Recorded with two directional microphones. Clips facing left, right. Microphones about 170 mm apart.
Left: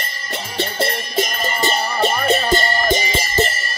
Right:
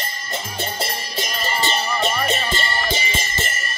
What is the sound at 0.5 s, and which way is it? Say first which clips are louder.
Music: left 8 dB; 55° left (ahead or behind).